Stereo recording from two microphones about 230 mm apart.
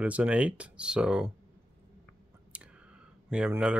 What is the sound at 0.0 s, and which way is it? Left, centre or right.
Speech, centre.